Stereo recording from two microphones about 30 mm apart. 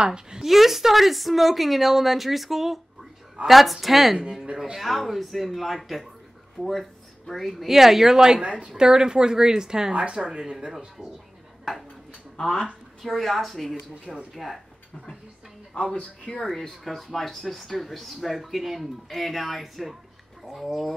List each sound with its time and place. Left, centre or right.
0.0 s speech: right
0.4 s speech: centre
7.6 s speech: centre
8.4 s speech: right
8.7 s speech: right
12.4 s speech: left
13.2 s speech: centre
16.3 s speech: left
16.8 s speech: centre